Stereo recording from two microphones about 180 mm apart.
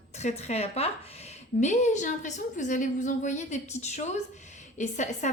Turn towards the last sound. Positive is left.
turn(degrees=40)  # may be behind; listen again after turning